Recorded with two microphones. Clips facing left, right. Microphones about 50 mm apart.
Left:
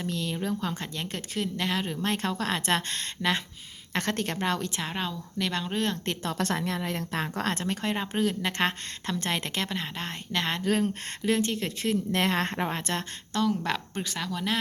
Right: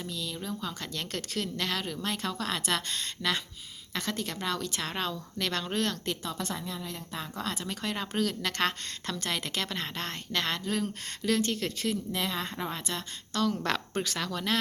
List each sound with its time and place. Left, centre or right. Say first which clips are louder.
0.1 s a woman's voice: left 7 dB; left
0.9 s a woman's voice: left 2 dB; left
3.9 s a woman's voice: left 5 dB; left
4.8 s a woman's voice: left 1 dB; centre
6.1 s a woman's voice: left 5 dB; left
7.9 s a woman's voice: left 3 dB; left
9.6 s a woman's voice: left 1 dB; centre
10.7 s a woman's voice: left 5 dB; left
12.1 s a woman's voice: left 6 dB; left
12.6 s a woman's voice: left 5 dB; left
13.3 s a woman's voice: left 2 dB; left
13.7 s speech: even; centre